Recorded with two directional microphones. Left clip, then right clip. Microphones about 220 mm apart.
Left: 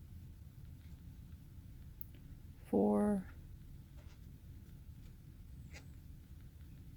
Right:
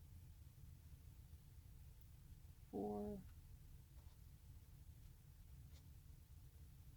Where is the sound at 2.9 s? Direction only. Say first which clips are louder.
Left 12 dB; 40° left (ahead or behind).